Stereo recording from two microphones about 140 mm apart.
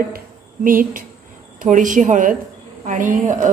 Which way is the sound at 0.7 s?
80° right.